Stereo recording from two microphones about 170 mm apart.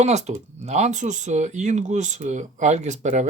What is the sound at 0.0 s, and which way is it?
Speech, 40° right (ahead or behind).